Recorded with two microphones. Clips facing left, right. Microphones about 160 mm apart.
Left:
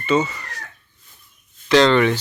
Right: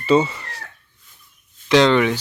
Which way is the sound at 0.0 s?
30° right (ahead or behind).